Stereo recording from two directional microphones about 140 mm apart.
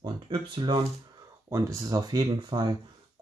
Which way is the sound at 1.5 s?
20° right (ahead or behind).